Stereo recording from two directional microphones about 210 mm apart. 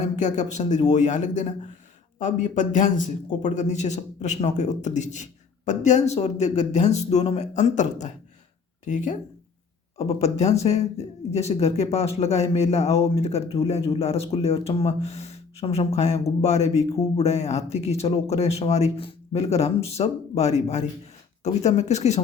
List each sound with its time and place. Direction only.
0.0 s speech: 35° left (ahead or behind)